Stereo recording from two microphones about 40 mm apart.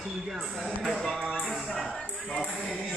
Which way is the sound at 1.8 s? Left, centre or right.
Centre.